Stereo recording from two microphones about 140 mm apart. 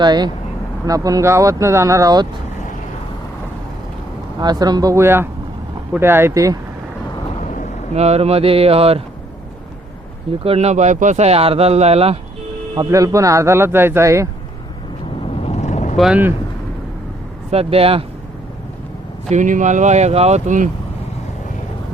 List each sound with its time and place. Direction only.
0.0 s speech: 30° right (ahead or behind)
4.4 s speech: 30° right (ahead or behind)
7.9 s speech: 50° right (ahead or behind)
10.4 s speech: 45° right (ahead or behind)
12.9 s speech: 20° right (ahead or behind)
15.4 s vehicle: 55° left (ahead or behind)
16.0 s speech: 5° right (ahead or behind)
17.5 s speech: 45° right (ahead or behind)
19.3 s speech: 65° right (ahead or behind)